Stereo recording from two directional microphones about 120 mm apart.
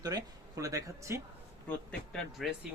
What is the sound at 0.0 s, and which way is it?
Speech, 30° right (ahead or behind).